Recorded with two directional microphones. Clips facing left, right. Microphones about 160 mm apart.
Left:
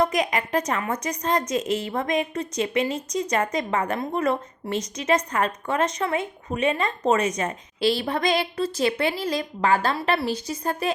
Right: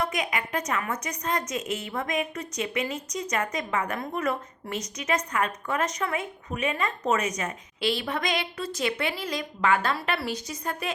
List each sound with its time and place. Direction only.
0.0 s a woman's voice: 35° left (ahead or behind)